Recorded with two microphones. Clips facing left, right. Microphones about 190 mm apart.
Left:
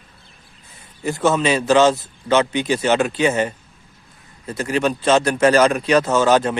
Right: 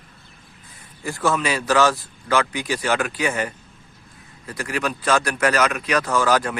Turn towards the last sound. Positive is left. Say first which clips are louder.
# left 4 dB
turn(degrees=25)  # may be behind; listen again after turning